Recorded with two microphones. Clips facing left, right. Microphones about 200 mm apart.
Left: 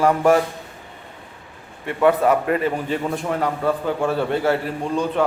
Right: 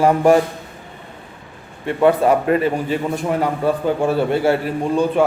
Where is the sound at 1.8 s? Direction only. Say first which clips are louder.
Right 2 dB; 30° right (ahead or behind).